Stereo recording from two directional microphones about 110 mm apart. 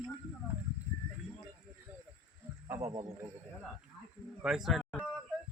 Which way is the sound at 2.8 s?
35° right (ahead or behind).